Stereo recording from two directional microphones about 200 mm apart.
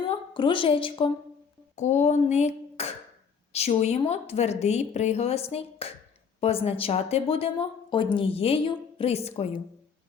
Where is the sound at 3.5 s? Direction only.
30° left (ahead or behind).